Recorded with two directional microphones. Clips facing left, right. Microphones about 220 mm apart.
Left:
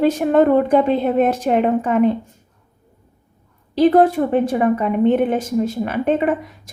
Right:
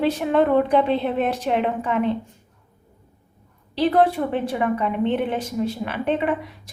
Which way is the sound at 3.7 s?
45° left (ahead or behind).